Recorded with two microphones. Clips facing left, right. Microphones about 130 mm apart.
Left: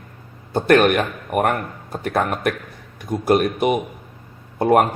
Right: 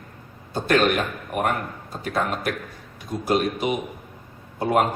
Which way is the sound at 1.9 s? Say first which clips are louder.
Left 4 dB; 60° left (ahead or behind).